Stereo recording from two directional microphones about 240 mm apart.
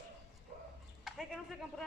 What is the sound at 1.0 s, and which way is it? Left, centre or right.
Speech, centre.